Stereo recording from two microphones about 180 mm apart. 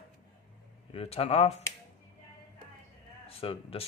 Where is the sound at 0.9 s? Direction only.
35° left (ahead or behind).